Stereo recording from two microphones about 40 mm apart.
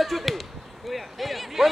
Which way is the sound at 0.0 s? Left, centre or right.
Centre.